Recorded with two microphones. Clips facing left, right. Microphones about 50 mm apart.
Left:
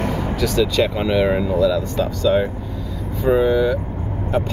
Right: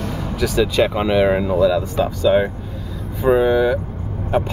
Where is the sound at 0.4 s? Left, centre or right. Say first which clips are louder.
Right 2 dB; centre.